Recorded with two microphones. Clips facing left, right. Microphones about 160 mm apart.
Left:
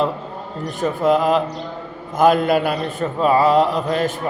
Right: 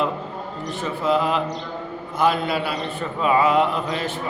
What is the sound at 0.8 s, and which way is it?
A man's voice, 45° left (ahead or behind).